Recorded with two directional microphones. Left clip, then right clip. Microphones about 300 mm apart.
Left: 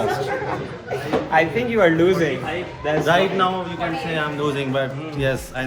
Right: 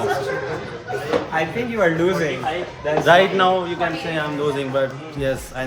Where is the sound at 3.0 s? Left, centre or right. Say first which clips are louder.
Right 5 dB; right.